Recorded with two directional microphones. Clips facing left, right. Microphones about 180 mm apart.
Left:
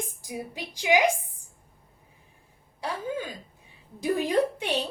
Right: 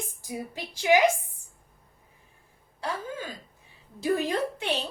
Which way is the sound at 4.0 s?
15° left (ahead or behind).